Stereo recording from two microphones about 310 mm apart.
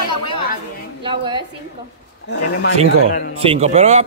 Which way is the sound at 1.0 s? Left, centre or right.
Centre.